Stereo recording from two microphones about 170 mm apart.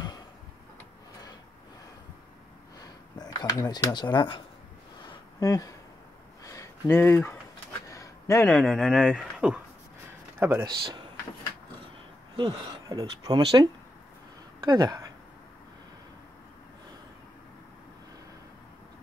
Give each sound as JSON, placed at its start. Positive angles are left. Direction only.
{"t": 2.8, "sound": "a sound", "side_deg": 25}
{"t": 5.4, "sound": "speech", "side_deg": 20}
{"t": 6.4, "sound": "a sound", "side_deg": 15}
{"t": 8.5, "sound": "speech", "side_deg": 0}
{"t": 10.6, "sound": "speech", "side_deg": -25}
{"t": 12.4, "sound": "speech", "side_deg": -25}